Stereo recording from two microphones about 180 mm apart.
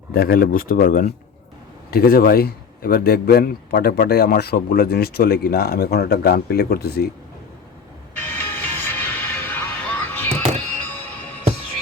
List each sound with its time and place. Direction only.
0.1 s a man's voice: 55° left (ahead or behind)
8.1 s music: 10° left (ahead or behind)